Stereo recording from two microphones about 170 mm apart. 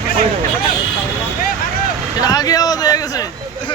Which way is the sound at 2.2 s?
20° left (ahead or behind).